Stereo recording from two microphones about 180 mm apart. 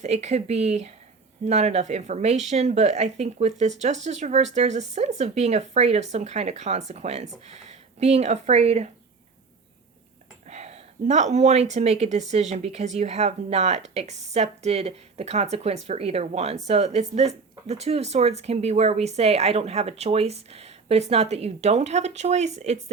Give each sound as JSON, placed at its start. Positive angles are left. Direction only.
{"t": 0.0, "sound": "speech", "side_deg": -40}
{"t": 10.5, "sound": "speech", "side_deg": -35}